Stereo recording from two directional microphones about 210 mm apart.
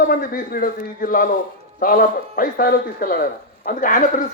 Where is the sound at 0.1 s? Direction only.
45° left (ahead or behind).